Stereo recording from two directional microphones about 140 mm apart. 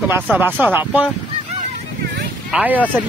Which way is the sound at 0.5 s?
10° right (ahead or behind).